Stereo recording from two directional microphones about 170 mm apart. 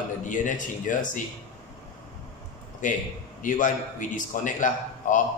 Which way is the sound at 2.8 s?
50° left (ahead or behind).